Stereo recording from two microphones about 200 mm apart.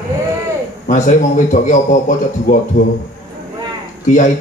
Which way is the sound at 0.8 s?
40° left (ahead or behind).